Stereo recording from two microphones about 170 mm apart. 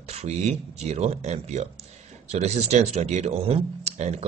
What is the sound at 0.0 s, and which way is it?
Speech, 40° right (ahead or behind).